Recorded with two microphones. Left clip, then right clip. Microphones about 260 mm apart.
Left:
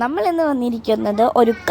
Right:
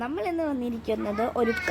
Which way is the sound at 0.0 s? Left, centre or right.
Left.